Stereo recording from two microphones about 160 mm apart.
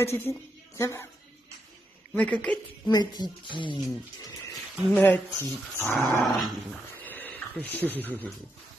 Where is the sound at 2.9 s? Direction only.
25° left (ahead or behind).